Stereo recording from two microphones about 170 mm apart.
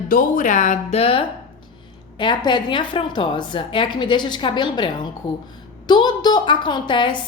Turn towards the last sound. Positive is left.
turn(degrees=30)  # may be behind; listen again after turning